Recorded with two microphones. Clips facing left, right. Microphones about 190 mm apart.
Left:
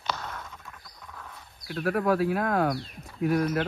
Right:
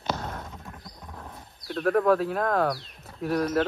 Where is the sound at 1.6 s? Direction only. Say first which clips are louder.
Right 4 dB; 5° left (ahead or behind).